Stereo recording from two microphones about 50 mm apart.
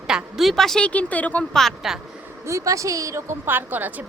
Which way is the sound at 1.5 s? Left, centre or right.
Centre.